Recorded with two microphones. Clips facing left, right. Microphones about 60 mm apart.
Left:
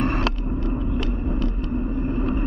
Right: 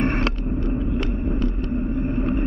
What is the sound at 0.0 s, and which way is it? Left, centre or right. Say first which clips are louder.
Vehicle: right 1 dB; right.